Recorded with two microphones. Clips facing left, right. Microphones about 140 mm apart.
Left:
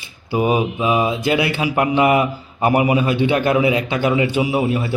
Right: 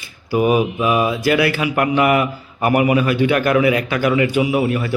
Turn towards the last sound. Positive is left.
turn(degrees=20)  # may be behind; listen again after turning